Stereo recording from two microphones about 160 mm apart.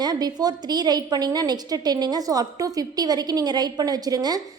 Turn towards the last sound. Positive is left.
turn(degrees=-25)  # may be behind; listen again after turning